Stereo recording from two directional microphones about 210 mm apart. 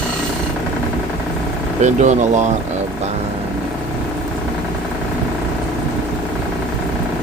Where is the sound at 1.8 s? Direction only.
35° right (ahead or behind).